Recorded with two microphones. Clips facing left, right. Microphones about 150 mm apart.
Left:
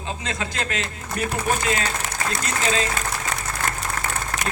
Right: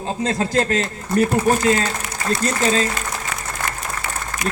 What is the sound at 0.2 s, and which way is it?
A man's voice, 35° right (ahead or behind).